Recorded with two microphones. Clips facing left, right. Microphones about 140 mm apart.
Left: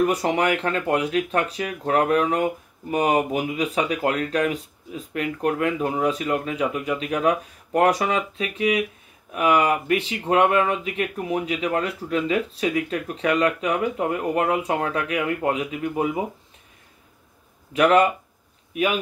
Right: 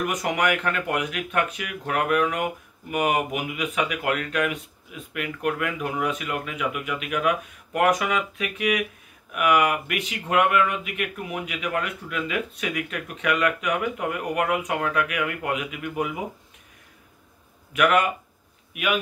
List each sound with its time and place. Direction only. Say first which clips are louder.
0.0 s speech: left 4 dB; 30° left (ahead or behind)
17.7 s a man's voice: left 4 dB; 30° left (ahead or behind)